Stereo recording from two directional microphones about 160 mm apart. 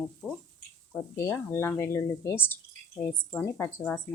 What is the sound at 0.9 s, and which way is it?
Speech, 10° left (ahead or behind).